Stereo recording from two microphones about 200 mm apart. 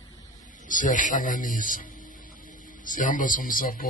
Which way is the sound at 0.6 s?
40° left (ahead or behind).